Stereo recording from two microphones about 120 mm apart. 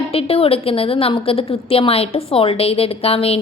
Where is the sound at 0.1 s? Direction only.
50° left (ahead or behind).